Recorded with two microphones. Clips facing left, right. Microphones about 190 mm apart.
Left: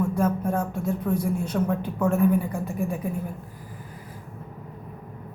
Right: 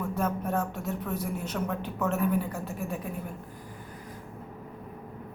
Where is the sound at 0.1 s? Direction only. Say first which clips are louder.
Left 5 dB; 10° left (ahead or behind).